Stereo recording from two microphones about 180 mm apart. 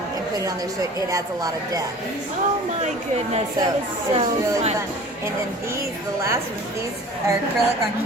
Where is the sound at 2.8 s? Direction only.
35° right (ahead or behind).